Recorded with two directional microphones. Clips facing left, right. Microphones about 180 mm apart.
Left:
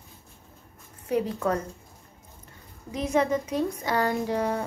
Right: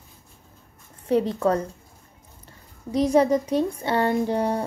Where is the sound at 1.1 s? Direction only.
30° right (ahead or behind).